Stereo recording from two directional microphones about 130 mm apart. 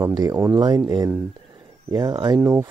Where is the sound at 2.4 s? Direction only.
20° right (ahead or behind).